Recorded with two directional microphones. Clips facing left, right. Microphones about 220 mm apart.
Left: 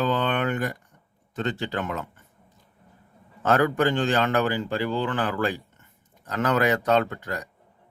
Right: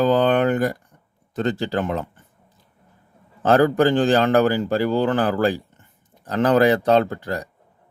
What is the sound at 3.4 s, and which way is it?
A man's voice, 35° right (ahead or behind).